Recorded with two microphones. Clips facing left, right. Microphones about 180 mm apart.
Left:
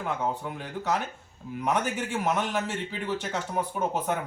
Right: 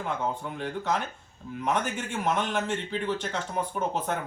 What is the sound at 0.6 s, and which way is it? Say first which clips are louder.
Speech: right 1 dB; 5° left (ahead or behind).